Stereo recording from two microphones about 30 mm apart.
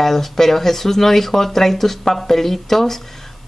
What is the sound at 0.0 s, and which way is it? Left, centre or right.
Speech, centre.